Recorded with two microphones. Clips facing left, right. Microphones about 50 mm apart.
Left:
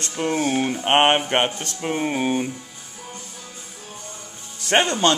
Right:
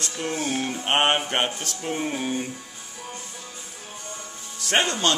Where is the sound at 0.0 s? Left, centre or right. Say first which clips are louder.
Left 5 dB; left.